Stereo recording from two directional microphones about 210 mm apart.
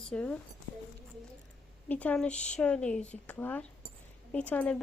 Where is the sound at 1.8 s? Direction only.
5° left (ahead or behind).